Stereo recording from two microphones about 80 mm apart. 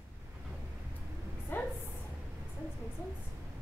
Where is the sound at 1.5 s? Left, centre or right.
Left.